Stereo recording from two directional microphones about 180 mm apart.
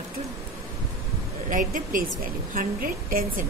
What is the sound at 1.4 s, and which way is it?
Speech, 45° right (ahead or behind).